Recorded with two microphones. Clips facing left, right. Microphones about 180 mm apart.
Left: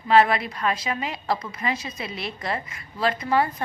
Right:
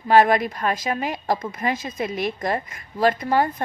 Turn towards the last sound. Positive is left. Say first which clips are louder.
# right 2 dB
turn(degrees=-45)  # may be behind; listen again after turning